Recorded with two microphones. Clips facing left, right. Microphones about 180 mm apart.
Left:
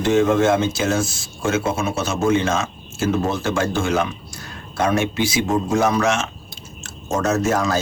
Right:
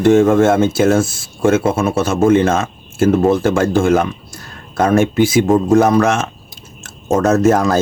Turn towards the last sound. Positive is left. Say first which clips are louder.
# right 7 dB
turn(degrees=-50)  # may be behind; listen again after turning